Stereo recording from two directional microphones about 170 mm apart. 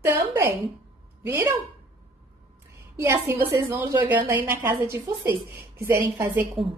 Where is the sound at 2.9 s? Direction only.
20° right (ahead or behind).